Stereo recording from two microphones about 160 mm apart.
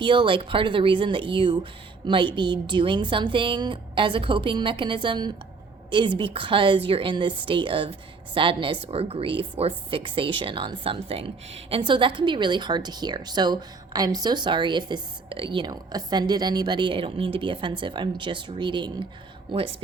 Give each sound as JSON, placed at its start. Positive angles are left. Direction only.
{"t": 0.0, "sound": "a woman's voice", "side_deg": -30}